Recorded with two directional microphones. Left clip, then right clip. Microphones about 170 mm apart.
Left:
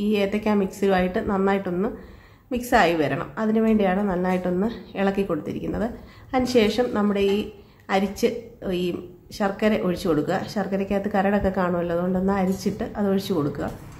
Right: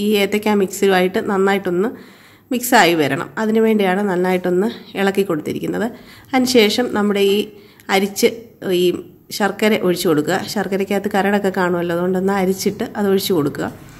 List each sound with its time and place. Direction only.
0.0 s a woman's voice: 30° right (ahead or behind)